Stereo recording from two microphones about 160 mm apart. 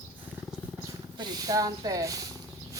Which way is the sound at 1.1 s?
25° right (ahead or behind).